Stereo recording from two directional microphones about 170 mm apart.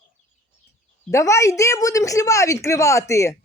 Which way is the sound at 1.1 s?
15° left (ahead or behind).